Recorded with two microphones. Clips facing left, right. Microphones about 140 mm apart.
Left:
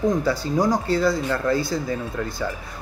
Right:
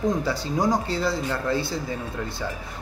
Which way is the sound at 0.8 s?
50° left (ahead or behind).